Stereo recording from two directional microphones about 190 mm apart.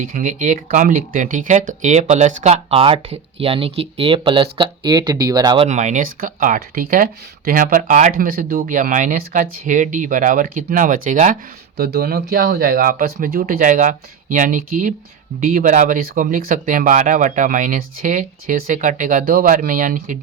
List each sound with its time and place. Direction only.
0.0 s speech: 45° right (ahead or behind); by 5.6 s 20° right (ahead or behind)
5.6 s speech: 40° right (ahead or behind)
11.8 s speech: 60° right (ahead or behind)